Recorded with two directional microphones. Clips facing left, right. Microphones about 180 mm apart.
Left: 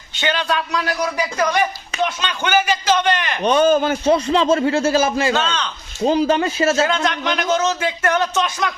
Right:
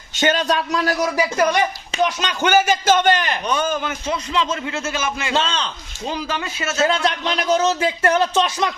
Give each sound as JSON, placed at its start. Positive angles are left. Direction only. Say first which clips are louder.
{"t": 0.2, "sound": "speech", "louder": "right 2 dB", "side_deg": -45}
{"t": 1.1, "sound": "speech", "louder": "right 2 dB", "side_deg": -5}
{"t": 2.2, "sound": "a man's voice", "louder": "right 2 dB", "side_deg": -45}
{"t": 3.4, "sound": "a man's voice", "louder": "left 7 dB", "side_deg": 30}
{"t": 5.3, "sound": "speech", "louder": "left 1 dB", "side_deg": -30}
{"t": 6.1, "sound": "a man's voice", "louder": "left 9 dB", "side_deg": 35}
{"t": 6.8, "sound": "speech", "louder": "even", "side_deg": -30}